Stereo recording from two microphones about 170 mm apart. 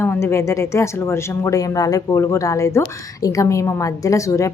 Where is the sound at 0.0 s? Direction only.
15° left (ahead or behind).